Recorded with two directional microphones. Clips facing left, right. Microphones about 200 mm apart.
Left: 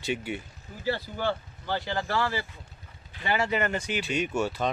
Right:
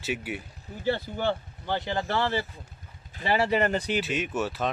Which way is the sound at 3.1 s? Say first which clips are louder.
Right 3 dB; 35° right (ahead or behind).